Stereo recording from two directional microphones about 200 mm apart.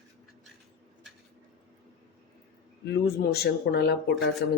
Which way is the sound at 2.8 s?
55° left (ahead or behind).